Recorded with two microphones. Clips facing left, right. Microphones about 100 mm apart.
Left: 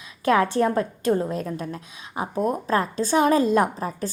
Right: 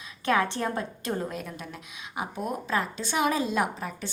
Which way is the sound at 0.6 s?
35° left (ahead or behind).